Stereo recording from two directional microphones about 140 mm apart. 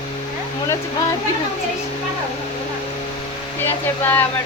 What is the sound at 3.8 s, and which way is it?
Speech, 15° left (ahead or behind).